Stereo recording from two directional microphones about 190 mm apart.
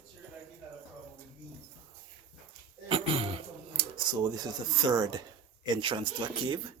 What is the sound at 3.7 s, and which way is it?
Speech, 20° right (ahead or behind).